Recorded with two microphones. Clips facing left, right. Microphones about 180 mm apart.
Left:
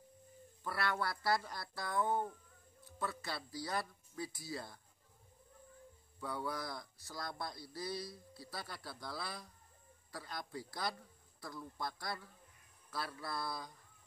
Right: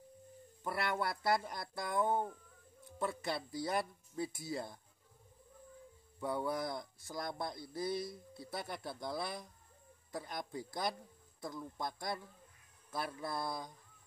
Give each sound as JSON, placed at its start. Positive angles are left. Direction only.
{"t": 0.7, "sound": "speech", "side_deg": -20}
{"t": 6.1, "sound": "speech", "side_deg": -20}